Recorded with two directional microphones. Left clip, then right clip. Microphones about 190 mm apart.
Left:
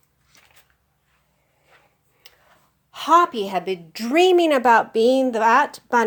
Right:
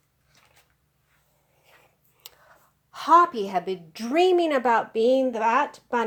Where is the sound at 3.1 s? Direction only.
15° left (ahead or behind); by 6.1 s 40° left (ahead or behind).